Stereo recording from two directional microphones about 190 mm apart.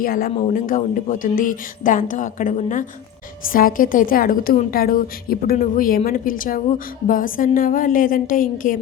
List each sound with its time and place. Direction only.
0.0 s speech: 50° left (ahead or behind)